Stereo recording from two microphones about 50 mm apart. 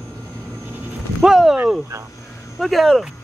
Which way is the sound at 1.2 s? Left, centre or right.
Centre.